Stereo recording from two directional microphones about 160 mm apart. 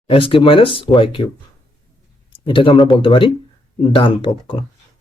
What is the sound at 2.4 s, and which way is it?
Speech, 30° left (ahead or behind).